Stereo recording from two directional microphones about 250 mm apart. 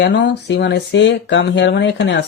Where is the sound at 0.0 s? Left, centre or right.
Left.